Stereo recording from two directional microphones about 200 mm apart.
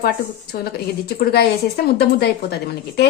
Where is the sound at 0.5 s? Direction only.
50° left (ahead or behind).